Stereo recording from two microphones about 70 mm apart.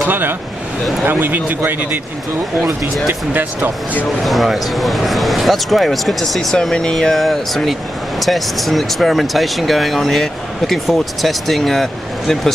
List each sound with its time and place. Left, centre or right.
0.0 s speech: right
4.2 s speech: centre